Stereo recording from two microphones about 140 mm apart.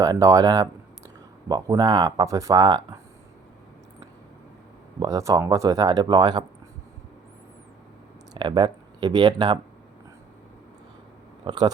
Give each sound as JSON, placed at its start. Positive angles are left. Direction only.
{"t": 0.0, "sound": "speech", "side_deg": -25}
{"t": 4.9, "sound": "speech", "side_deg": -25}
{"t": 8.3, "sound": "speech", "side_deg": -35}
{"t": 11.4, "sound": "speech", "side_deg": -30}